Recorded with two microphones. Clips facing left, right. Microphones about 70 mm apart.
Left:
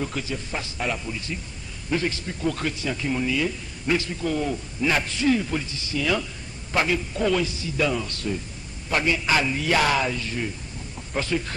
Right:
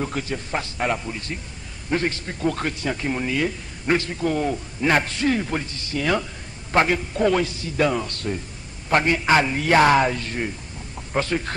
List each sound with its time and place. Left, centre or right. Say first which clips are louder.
0.0 s a man's voice: right 2 dB; right